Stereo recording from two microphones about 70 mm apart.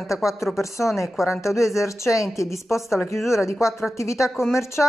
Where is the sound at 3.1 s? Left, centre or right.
Centre.